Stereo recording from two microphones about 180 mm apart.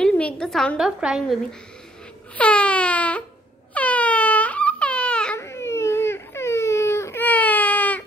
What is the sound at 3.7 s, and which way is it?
Crying, 10° left (ahead or behind).